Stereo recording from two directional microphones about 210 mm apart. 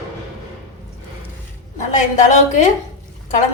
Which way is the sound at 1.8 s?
35° left (ahead or behind).